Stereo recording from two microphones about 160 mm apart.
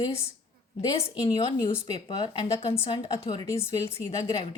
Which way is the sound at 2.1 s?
30° left (ahead or behind).